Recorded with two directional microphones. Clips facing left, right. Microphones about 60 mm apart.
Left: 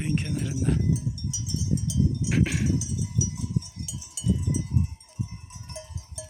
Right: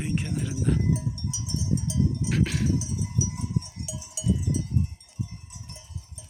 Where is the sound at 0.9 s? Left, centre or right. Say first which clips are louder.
Even; right.